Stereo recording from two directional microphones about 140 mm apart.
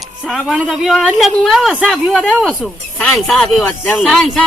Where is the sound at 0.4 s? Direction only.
Centre (ahead or behind).